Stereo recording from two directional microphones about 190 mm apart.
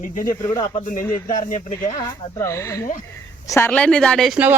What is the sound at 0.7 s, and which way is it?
Speech, 45° left (ahead or behind).